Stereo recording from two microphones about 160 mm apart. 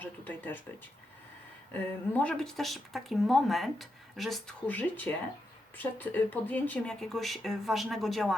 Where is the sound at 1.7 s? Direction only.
10° left (ahead or behind).